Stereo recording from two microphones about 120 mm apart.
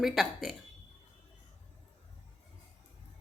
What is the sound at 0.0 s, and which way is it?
Speech, centre (ahead or behind).